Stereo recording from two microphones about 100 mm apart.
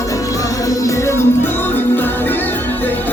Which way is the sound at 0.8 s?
30° left (ahead or behind).